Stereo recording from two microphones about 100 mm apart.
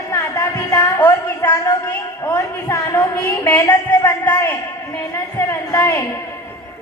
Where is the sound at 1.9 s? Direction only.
25° left (ahead or behind).